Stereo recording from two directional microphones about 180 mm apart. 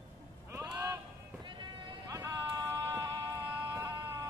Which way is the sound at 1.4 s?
25° right (ahead or behind).